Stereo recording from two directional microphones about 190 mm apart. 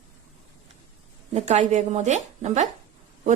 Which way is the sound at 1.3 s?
35° right (ahead or behind).